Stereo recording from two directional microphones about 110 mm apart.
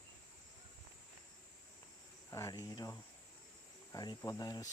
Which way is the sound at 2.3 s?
30° left (ahead or behind).